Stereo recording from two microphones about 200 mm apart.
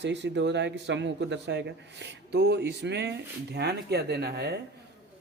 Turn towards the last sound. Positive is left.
turn(degrees=-55)  # may be behind; listen again after turning